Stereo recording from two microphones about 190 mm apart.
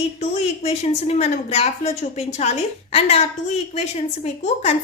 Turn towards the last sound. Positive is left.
turn(degrees=35)  # may be behind; listen again after turning